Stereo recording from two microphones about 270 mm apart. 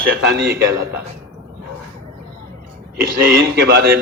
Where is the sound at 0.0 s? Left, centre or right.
Right.